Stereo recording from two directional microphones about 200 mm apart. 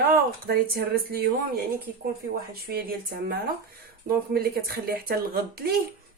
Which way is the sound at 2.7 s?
55° right (ahead or behind).